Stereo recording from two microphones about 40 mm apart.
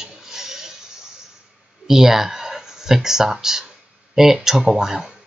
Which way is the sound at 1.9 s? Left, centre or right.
Centre.